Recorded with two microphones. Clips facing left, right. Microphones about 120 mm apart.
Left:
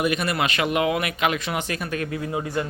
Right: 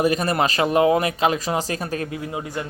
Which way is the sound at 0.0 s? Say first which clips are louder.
Right 4 dB; 35° right (ahead or behind).